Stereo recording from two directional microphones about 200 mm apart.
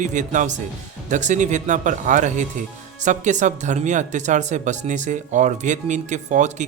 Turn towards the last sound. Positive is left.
turn(degrees=-35)  # may be behind; listen again after turning